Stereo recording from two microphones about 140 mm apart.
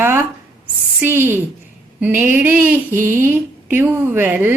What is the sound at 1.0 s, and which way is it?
A woman's voice, 15° right (ahead or behind).